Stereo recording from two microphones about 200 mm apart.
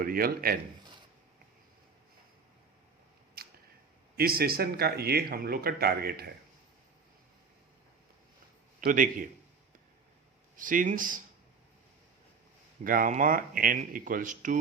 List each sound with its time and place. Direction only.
0.0 s speech: 45° right (ahead or behind)
3.4 s a sound: 50° right (ahead or behind)
4.2 s speech: 50° right (ahead or behind)
8.8 s speech: 45° right (ahead or behind)
10.6 s speech: 40° right (ahead or behind)
12.8 s speech: 45° right (ahead or behind)